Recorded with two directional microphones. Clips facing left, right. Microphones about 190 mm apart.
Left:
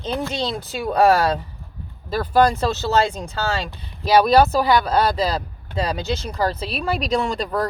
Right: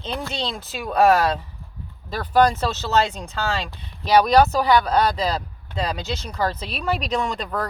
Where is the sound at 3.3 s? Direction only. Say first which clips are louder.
Left 1 dB; 40° left (ahead or behind).